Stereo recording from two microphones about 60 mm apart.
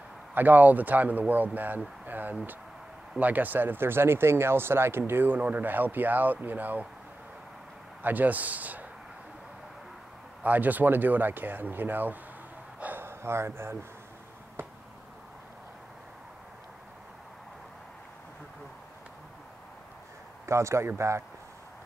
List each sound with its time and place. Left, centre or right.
0.3 s a man's voice: right
8.0 s a man's voice: right
10.4 s speech: right
12.8 s a sound: right
20.4 s speech: right